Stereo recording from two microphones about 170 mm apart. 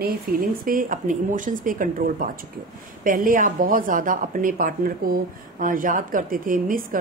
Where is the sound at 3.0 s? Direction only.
55° right (ahead or behind).